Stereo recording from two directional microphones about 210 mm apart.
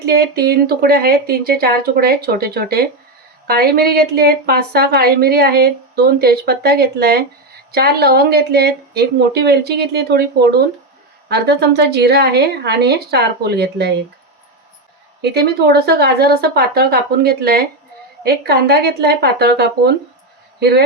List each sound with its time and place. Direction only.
0.0 s a woman's voice: 50° right (ahead or behind)
15.2 s a woman's voice: 50° right (ahead or behind)